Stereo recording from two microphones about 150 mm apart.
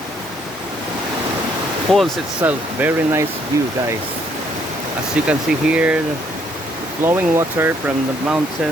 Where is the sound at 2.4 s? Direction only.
10° right (ahead or behind).